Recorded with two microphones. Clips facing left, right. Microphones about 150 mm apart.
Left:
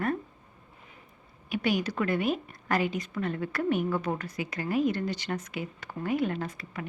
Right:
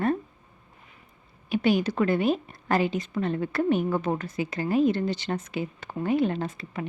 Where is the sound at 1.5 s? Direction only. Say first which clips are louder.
Right 5 dB; 25° right (ahead or behind).